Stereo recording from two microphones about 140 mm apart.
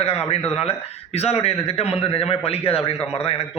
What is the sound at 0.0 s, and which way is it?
A man's voice, 45° left (ahead or behind).